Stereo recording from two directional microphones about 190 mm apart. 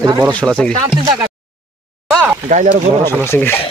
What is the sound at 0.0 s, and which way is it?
Speech, 20° right (ahead or behind).